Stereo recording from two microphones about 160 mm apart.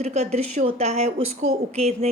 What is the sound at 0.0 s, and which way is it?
Speech, 45° right (ahead or behind).